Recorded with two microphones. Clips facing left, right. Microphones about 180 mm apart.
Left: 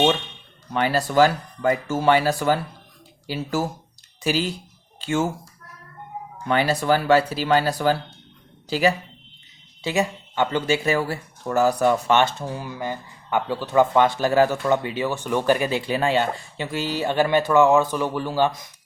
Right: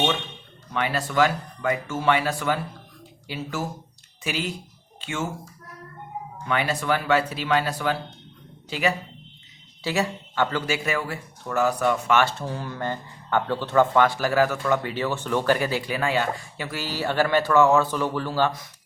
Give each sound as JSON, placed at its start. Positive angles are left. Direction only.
{"t": 0.7, "sound": "speech", "side_deg": 35}
{"t": 6.5, "sound": "speech", "side_deg": 35}
{"t": 9.8, "sound": "speech", "side_deg": 20}
{"t": 12.2, "sound": "speech", "side_deg": 15}